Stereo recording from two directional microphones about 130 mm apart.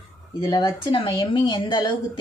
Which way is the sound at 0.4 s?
30° left (ahead or behind).